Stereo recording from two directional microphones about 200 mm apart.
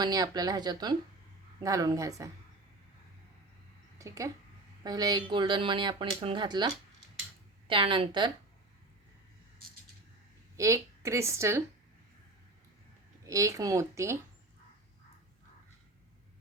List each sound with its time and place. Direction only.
0.0 s a woman's voice: 20° right (ahead or behind)
3.9 s speech: 15° right (ahead or behind)
7.7 s speech: 25° right (ahead or behind)
10.6 s a woman's voice: 15° right (ahead or behind)
13.2 s a woman's voice: 15° right (ahead or behind)